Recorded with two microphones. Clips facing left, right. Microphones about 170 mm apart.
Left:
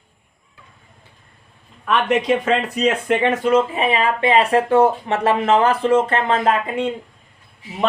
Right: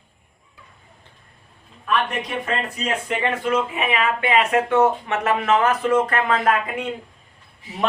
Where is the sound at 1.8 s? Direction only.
90° left; by 3.2 s 70° left (ahead or behind).